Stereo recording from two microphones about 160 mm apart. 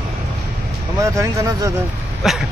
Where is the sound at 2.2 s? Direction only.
Centre (ahead or behind).